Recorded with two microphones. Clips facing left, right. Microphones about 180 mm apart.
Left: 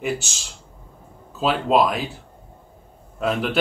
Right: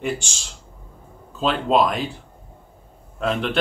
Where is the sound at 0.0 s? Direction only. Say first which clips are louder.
Even; 5° left (ahead or behind).